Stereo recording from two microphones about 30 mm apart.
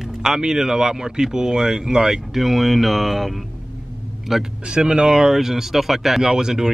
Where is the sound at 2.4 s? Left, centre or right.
Centre.